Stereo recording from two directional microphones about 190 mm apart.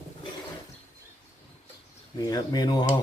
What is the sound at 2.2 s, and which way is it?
Speech, 20° left (ahead or behind).